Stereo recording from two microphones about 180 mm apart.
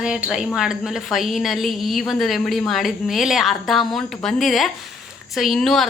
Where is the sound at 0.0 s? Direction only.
5° right (ahead or behind).